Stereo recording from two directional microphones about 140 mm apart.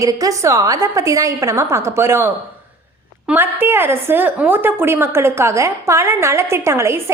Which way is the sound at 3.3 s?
15° right (ahead or behind).